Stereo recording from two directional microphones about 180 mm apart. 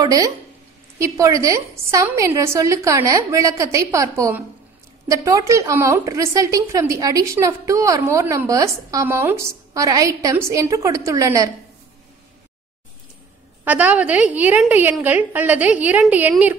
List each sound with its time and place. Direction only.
0.0 s a woman's voice: 20° right (ahead or behind)
13.7 s a woman's voice: 10° right (ahead or behind)